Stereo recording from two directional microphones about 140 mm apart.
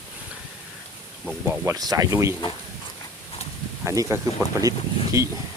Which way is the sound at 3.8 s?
20° right (ahead or behind).